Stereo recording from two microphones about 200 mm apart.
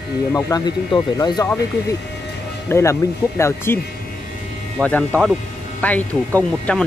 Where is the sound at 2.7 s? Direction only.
15° left (ahead or behind).